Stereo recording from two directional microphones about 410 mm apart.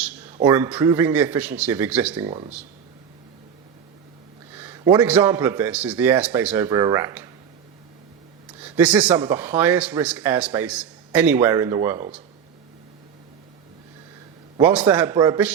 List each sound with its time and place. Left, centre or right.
0.3 s speech: centre
4.5 s speech: centre
8.6 s speech: centre
14.6 s speech: centre